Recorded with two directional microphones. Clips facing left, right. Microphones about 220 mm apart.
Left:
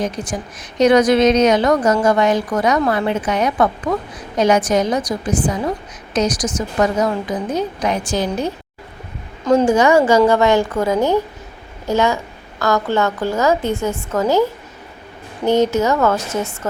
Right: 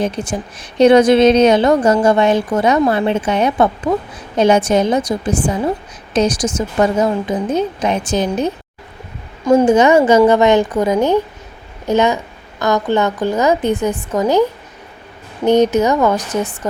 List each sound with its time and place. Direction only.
0.0 s a woman's voice: 30° right (ahead or behind)
9.6 s a woman's voice: 20° right (ahead or behind)
15.4 s a woman's voice: 20° right (ahead or behind)